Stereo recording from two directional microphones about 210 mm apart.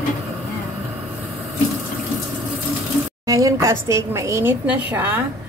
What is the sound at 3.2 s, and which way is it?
A woman's voice, 15° right (ahead or behind).